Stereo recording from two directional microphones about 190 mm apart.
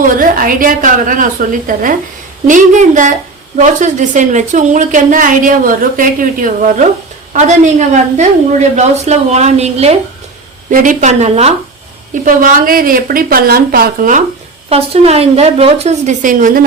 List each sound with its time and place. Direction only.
0.2 s a woman's voice: 45° right (ahead or behind)
8.7 s a woman's voice: 35° right (ahead or behind)
10.7 s a woman's voice: 45° right (ahead or behind)
12.2 s a woman's voice: 45° right (ahead or behind)
14.7 s a woman's voice: 30° right (ahead or behind)